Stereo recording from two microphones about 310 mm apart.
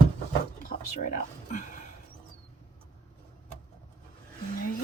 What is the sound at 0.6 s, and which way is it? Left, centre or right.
Speech, left.